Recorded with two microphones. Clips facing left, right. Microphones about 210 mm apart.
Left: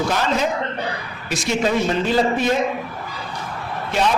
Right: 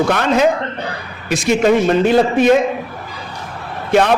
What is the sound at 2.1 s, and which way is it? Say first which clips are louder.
Speech: right 8 dB; 60° right (ahead or behind).